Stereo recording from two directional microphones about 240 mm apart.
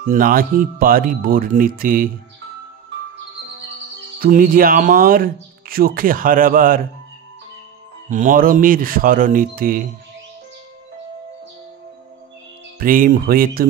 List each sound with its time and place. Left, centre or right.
0.1 s speech: right
4.2 s speech: right
8.1 s speech: right
12.7 s speech: right